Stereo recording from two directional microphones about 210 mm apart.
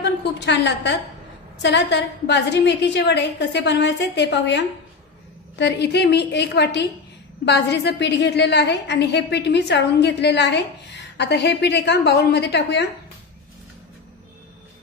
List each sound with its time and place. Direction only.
0.0 s a woman's voice: 55° left (ahead or behind)